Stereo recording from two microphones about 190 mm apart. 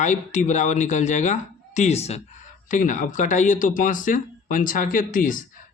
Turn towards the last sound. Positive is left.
turn(degrees=45)  # may be behind; listen again after turning